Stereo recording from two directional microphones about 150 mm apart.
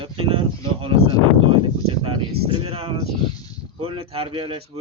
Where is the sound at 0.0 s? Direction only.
35° right (ahead or behind).